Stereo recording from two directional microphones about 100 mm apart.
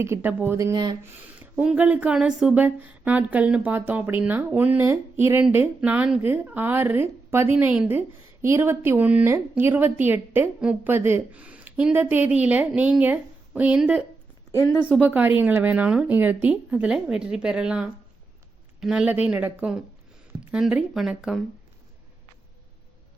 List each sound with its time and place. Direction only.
0.0 s speech: 20° right (ahead or behind)
0.6 s speech: 40° right (ahead or behind)
1.4 s a woman's voice: 10° right (ahead or behind)
10.9 s a woman's voice: 25° right (ahead or behind)
14.5 s speech: 30° left (ahead or behind)
15.0 s a woman's voice: 15° right (ahead or behind)